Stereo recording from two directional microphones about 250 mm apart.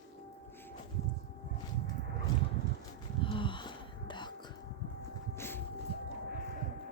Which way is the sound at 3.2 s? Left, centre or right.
Centre.